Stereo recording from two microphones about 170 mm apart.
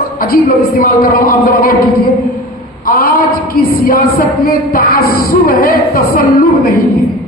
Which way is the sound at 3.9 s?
60° left (ahead or behind).